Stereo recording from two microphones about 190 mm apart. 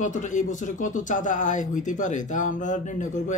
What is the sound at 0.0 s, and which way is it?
Speech, 40° left (ahead or behind).